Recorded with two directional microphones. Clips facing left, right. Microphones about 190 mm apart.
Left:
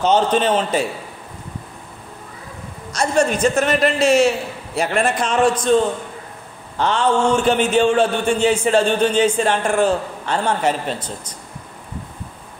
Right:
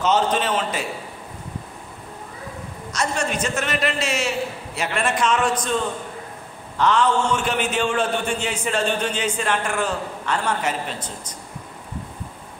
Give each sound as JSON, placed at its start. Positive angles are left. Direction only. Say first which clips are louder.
{"t": 0.0, "sound": "a man's voice", "louder": "left 4 dB", "side_deg": 35}
{"t": 3.3, "sound": "a man's voice", "louder": "left 7 dB", "side_deg": 35}
{"t": 6.8, "sound": "a man's voice", "louder": "left 2 dB", "side_deg": 30}